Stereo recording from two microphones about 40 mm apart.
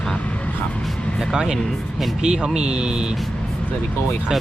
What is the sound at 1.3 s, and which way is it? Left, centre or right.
Speech, centre.